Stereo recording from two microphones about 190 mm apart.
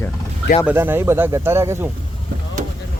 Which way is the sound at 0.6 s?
10° right (ahead or behind).